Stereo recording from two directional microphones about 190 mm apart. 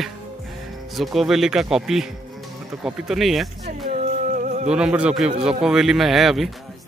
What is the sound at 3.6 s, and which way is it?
Music, 40° right (ahead or behind).